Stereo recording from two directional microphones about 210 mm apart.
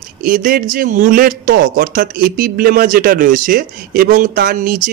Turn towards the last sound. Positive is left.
turn(degrees=-40)  # may be behind; listen again after turning